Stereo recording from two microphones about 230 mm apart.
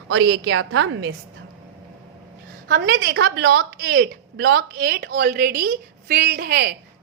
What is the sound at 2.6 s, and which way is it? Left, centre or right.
A woman's voice, right.